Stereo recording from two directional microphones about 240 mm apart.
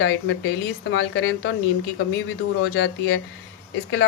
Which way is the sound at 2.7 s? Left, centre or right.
Left.